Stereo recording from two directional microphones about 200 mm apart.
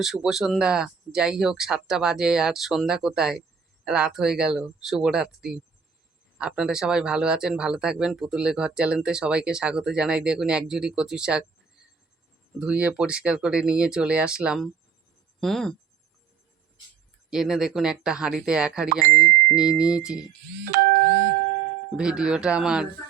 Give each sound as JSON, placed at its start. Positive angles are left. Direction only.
{"t": 0.0, "sound": "speech", "side_deg": 0}
{"t": 12.5, "sound": "speech", "side_deg": -5}
{"t": 17.2, "sound": "speech", "side_deg": 0}
{"t": 19.2, "sound": "ding", "side_deg": 15}
{"t": 19.5, "sound": "speech", "side_deg": -5}
{"t": 20.7, "sound": "ding-dong", "side_deg": -45}
{"t": 21.9, "sound": "speech", "side_deg": -5}